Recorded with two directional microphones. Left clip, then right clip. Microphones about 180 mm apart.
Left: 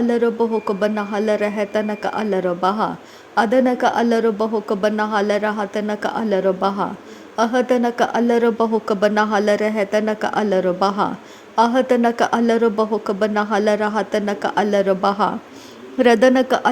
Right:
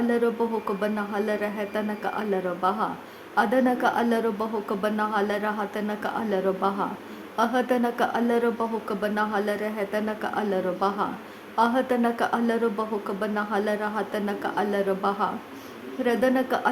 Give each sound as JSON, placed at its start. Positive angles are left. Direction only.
{"t": 0.1, "sound": "a woman's voice", "side_deg": 25}